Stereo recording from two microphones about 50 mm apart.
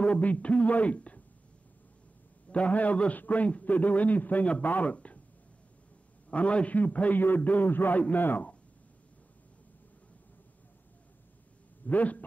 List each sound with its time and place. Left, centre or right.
0.0 s a man's voice: left
2.5 s a man's voice: left
6.3 s a man's voice: left
11.8 s speech: left